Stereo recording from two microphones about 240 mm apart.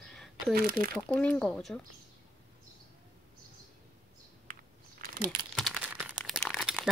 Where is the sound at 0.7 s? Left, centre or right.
Right.